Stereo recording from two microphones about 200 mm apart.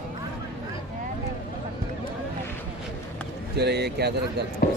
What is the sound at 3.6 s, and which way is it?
Speech, 55° right (ahead or behind).